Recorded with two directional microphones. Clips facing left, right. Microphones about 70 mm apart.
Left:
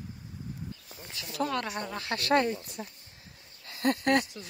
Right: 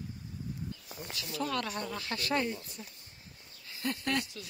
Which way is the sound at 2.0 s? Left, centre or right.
Left.